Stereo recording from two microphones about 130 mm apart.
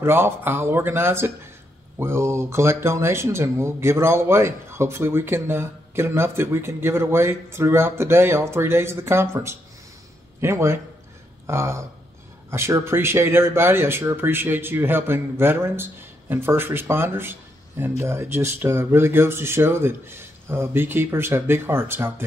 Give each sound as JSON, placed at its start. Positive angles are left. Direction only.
{"t": 0.0, "sound": "speech", "side_deg": -20}